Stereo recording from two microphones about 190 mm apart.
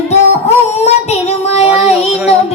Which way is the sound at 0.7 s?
35° left (ahead or behind).